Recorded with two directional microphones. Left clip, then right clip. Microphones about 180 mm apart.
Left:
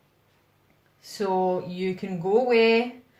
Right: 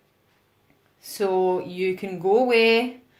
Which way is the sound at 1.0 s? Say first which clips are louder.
Right 2 dB; 35° right (ahead or behind).